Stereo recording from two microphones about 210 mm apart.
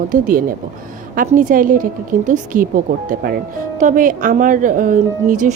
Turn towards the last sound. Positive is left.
turn(degrees=-35)  # may be behind; listen again after turning